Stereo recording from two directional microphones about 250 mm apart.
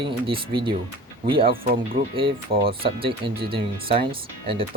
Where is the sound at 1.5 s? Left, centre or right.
Right.